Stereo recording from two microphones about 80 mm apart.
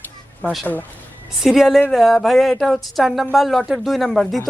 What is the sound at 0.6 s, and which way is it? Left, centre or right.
Speech, left.